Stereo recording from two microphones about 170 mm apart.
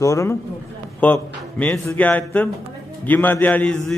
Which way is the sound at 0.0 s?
20° left (ahead or behind).